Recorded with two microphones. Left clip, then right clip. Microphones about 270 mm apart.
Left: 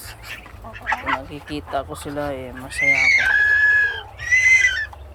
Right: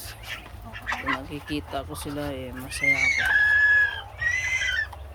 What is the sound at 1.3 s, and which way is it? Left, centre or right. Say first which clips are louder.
Speech: left 4 dB; centre.